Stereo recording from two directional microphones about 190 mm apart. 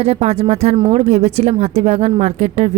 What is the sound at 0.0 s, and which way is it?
Speech, 35° right (ahead or behind).